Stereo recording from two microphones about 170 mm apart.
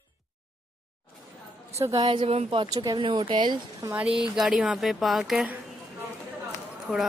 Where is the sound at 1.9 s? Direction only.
25° right (ahead or behind).